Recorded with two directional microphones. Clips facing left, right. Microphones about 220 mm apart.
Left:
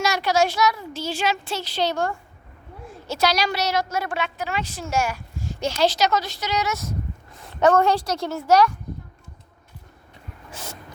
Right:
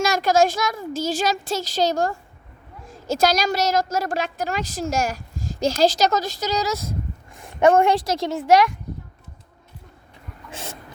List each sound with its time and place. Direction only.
0.0 s a woman's voice: 50° right (ahead or behind)
7.3 s a woman's voice: 15° right (ahead or behind)